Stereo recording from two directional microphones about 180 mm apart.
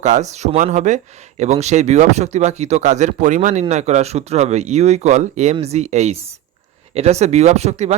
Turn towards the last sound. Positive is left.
turn(degrees=-35)  # may be behind; listen again after turning